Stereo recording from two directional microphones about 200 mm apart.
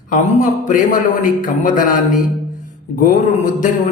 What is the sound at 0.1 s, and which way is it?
A man's voice, 40° left (ahead or behind).